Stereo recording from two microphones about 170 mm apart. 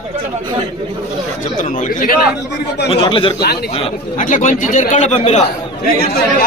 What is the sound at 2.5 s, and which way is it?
Speech, 80° left.